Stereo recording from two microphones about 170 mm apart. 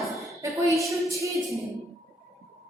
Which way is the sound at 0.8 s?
20° right (ahead or behind).